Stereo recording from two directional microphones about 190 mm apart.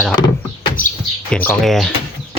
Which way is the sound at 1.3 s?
5° left (ahead or behind).